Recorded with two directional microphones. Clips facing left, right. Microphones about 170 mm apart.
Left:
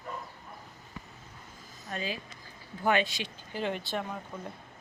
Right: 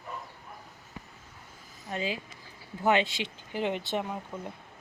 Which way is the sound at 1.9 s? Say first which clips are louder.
Right 3 dB; 20° right (ahead or behind).